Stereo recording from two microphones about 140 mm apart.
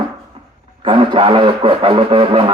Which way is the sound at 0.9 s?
35° right (ahead or behind).